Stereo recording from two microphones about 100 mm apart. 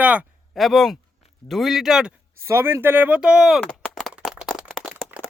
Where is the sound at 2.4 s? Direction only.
25° right (ahead or behind); by 3.6 s 5° right (ahead or behind).